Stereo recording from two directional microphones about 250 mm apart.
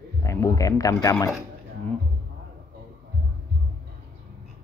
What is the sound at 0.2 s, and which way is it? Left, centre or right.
Speech, centre.